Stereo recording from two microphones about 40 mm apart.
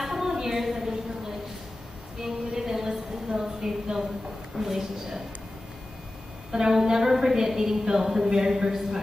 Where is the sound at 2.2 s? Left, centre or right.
Centre.